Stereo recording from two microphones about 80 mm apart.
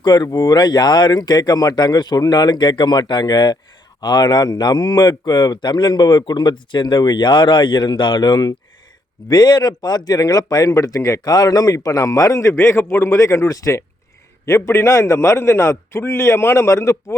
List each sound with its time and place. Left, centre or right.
0.0 s a man's voice: left